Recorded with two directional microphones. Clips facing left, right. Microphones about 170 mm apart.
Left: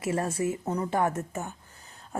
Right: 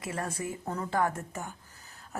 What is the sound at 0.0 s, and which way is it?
A woman's voice, 25° left (ahead or behind).